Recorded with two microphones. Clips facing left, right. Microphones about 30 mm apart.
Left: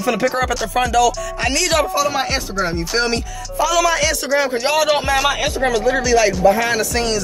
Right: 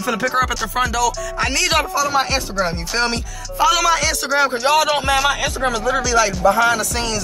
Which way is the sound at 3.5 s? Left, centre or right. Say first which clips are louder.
Right 1 dB; centre.